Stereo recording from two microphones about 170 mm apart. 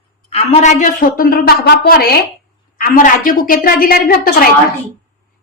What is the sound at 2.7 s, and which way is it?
A woman's voice, 55° left (ahead or behind).